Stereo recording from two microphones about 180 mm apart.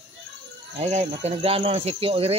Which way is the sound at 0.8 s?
35° right (ahead or behind).